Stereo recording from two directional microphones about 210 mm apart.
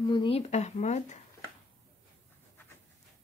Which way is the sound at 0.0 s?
20° left (ahead or behind).